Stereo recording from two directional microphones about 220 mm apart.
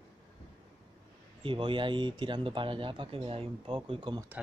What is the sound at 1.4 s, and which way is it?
Speech, 25° right (ahead or behind).